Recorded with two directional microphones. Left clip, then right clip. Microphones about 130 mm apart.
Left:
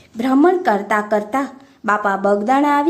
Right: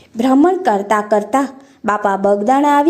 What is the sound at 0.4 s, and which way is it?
A woman's voice, 20° right (ahead or behind).